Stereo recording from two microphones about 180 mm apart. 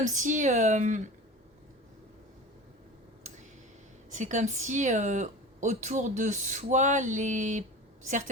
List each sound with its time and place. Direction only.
0.1 s speech: 45° right (ahead or behind)
4.1 s speech: 40° right (ahead or behind)